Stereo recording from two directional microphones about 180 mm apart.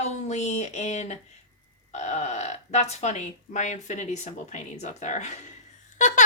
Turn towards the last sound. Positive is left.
turn(degrees=45)  # may be behind; listen again after turning